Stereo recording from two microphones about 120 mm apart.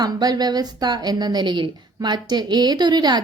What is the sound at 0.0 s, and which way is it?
A woman's voice, 35° right (ahead or behind).